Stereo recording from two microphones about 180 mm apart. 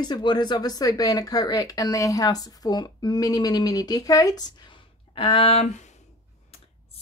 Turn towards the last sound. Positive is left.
turn(degrees=40)  # may be behind; listen again after turning